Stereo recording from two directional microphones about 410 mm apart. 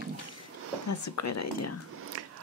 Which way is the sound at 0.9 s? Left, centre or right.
Left.